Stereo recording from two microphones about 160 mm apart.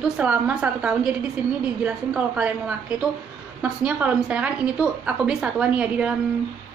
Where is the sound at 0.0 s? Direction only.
10° right (ahead or behind).